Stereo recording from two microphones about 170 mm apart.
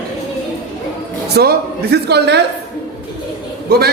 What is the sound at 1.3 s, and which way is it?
A man's voice, 70° right (ahead or behind).